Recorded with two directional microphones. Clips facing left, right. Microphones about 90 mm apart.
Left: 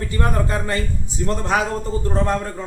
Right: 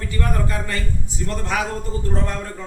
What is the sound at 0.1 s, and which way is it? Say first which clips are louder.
A man's voice: left 2 dB; 30° left (ahead or behind).